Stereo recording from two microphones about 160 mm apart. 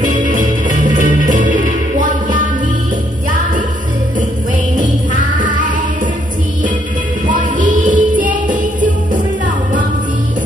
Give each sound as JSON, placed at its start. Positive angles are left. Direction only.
{"t": 0.1, "sound": "music", "side_deg": -50}
{"t": 7.2, "sound": "music", "side_deg": -55}